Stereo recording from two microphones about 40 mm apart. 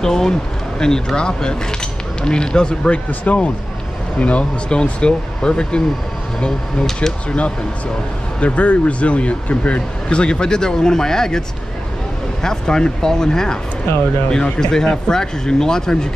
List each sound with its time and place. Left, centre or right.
0.0 s speech: centre
3.3 s speech: left
4.2 s speech: left; by 7.2 s centre
7.2 s speech: left